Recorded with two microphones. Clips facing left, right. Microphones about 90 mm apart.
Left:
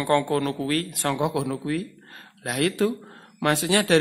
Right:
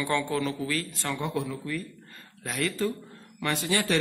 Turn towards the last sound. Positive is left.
turn(degrees=70)  # may be behind; listen again after turning